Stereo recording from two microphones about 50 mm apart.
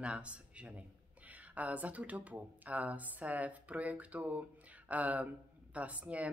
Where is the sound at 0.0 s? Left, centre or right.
Right.